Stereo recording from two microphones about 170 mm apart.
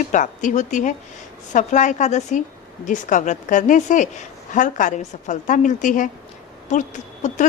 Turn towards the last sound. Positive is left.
turn(degrees=45)  # may be behind; listen again after turning